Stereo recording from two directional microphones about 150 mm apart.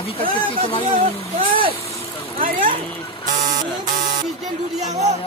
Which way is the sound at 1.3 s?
35° right (ahead or behind).